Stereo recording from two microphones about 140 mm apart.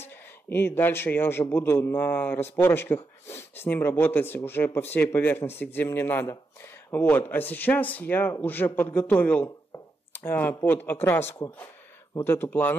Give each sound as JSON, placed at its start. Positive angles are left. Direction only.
{"t": 0.1, "sound": "speech", "side_deg": 15}